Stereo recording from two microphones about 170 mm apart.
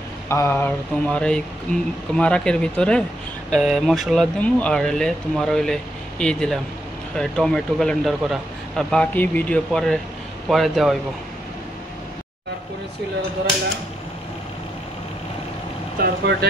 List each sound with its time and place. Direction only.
0.3 s speech: 15° left (ahead or behind)
16.0 s speech: 75° right (ahead or behind)